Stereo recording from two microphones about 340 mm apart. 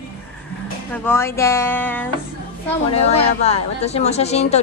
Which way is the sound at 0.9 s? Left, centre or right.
Centre.